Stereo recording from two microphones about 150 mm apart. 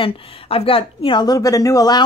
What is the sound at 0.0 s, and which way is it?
Speech, 40° left (ahead or behind).